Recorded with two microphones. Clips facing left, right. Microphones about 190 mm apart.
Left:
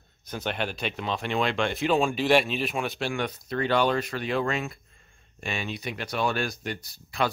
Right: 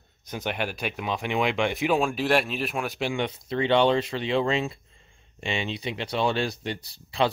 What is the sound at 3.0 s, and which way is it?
Speech, 20° right (ahead or behind).